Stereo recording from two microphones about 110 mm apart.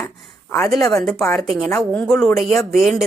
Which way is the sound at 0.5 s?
30° left (ahead or behind).